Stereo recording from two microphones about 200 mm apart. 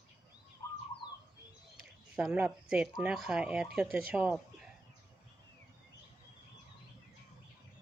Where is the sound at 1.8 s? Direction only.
5° right (ahead or behind).